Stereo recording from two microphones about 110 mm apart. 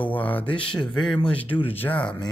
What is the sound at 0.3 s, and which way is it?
Speech, 15° left (ahead or behind).